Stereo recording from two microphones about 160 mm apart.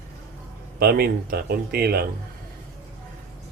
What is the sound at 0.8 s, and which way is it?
A man's voice, 75° right (ahead or behind).